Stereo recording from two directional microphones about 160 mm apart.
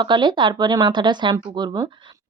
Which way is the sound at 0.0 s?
30° right (ahead or behind).